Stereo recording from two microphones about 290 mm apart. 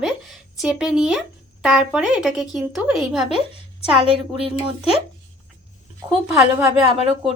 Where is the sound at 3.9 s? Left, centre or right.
Centre.